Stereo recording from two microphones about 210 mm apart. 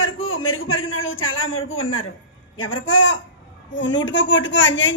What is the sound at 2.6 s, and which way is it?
A man's voice, 65° left (ahead or behind).